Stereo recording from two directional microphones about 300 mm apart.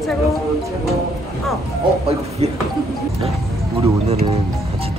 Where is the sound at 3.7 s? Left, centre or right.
Centre.